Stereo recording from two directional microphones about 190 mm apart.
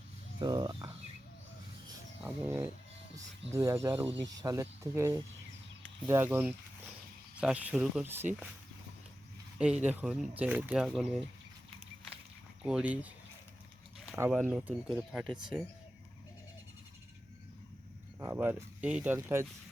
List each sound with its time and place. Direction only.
0.3 s speech: 25° right (ahead or behind)
2.2 s speech: 10° right (ahead or behind)
9.6 s speech: 5° right (ahead or behind)
12.6 s speech: 5° right (ahead or behind)
18.2 s speech: 10° right (ahead or behind)